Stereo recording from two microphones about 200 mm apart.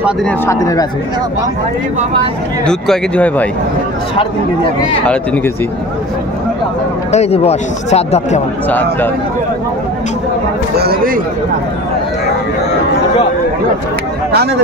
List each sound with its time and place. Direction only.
0.2 s speech: 5° left (ahead or behind)
0.6 s speech: 15° left (ahead or behind)
2.6 s speech: 5° left (ahead or behind)
5.0 s speech: 5° left (ahead or behind)
7.1 s speech: 30° left (ahead or behind)
8.6 s speech: 10° left (ahead or behind)
10.8 s speech: 50° right (ahead or behind)